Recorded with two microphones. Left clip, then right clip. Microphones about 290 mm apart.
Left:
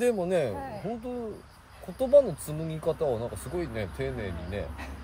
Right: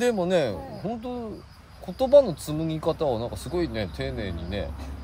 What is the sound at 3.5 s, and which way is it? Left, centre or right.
Speech, centre.